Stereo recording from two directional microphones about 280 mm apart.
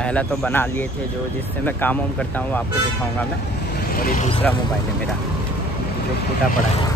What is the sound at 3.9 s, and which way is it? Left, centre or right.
Speech, left.